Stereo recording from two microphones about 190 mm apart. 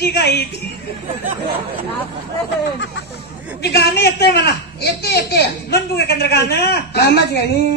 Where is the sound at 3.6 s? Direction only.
60° left (ahead or behind).